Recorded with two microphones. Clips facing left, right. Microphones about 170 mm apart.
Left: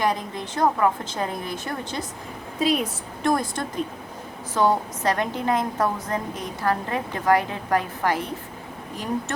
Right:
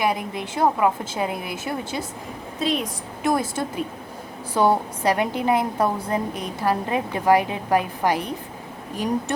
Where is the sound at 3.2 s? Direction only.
5° right (ahead or behind).